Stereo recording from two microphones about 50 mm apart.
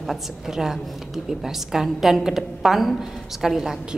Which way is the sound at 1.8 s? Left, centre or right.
Centre.